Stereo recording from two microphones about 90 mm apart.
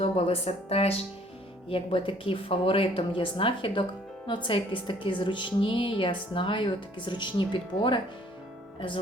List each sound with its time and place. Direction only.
0.0 s music: 90° left
0.7 s speech: 90° left
1.7 s speech: 80° left
4.4 s a woman's voice: 70° left (ahead or behind)